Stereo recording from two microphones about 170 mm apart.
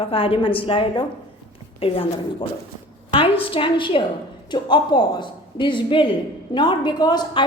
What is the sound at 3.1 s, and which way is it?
A woman's voice, 30° left (ahead or behind).